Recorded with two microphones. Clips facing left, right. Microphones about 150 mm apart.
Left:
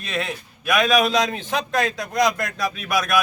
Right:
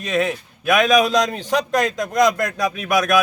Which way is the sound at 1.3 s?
40° right (ahead or behind).